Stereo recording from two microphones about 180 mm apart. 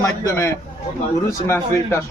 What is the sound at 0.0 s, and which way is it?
A man's voice, 15° left (ahead or behind).